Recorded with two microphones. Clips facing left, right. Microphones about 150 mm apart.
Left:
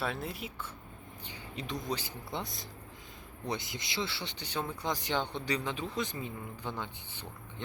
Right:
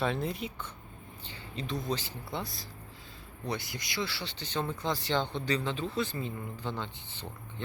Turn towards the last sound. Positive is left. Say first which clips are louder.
# right 2 dB
turn(degrees=10)  # may be behind; listen again after turning